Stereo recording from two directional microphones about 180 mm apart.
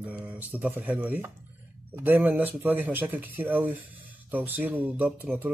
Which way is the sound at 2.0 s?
10° right (ahead or behind).